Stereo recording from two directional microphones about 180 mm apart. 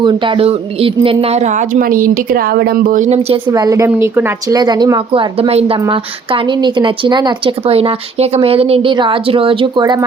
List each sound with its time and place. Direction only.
0.0 s a woman's voice: 25° right (ahead or behind)
3.4 s speech: 20° right (ahead or behind)